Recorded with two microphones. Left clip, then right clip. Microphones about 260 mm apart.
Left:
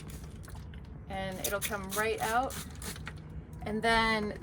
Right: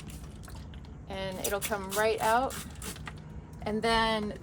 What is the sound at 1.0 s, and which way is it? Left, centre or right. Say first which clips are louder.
A woman's voice: right 2 dB; centre.